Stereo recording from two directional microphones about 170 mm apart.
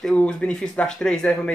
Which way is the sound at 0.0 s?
5° left (ahead or behind).